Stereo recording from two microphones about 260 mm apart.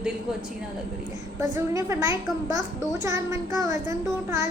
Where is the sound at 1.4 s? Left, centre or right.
Centre.